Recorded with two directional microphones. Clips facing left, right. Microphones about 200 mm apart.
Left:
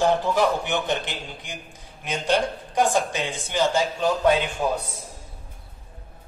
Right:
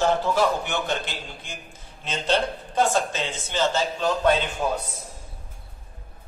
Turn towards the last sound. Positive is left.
turn(degrees=10)  # may be behind; listen again after turning